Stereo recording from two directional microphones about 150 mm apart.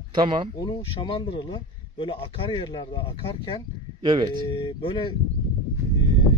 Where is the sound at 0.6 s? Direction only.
35° left (ahead or behind).